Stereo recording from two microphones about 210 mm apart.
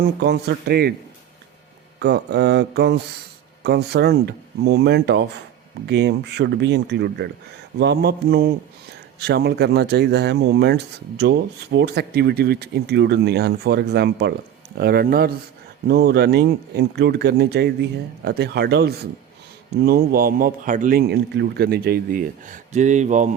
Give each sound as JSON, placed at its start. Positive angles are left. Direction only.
{"t": 0.2, "sound": "a man's voice", "side_deg": -50}
{"t": 2.0, "sound": "a man's voice", "side_deg": -50}